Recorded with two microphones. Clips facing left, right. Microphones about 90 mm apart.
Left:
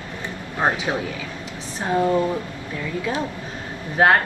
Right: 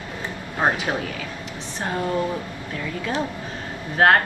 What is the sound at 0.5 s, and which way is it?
Speech, 10° right (ahead or behind).